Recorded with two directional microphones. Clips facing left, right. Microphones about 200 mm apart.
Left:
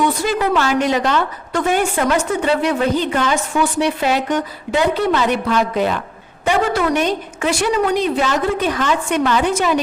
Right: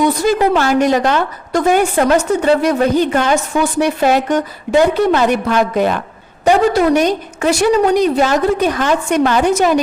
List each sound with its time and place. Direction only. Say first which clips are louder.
0.0 s a woman's voice: right 5 dB; 45° right (ahead or behind)
6.4 s a woman's voice: right 6 dB; 40° right (ahead or behind)